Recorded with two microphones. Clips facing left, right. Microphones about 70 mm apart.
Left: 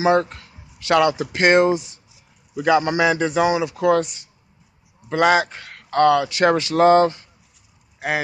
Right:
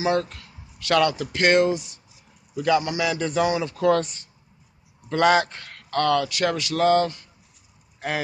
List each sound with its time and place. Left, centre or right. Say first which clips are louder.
0.0 s a man's voice: left 6 dB; left; by 5.9 s centre
5.9 s a man's voice: left 6 dB; centre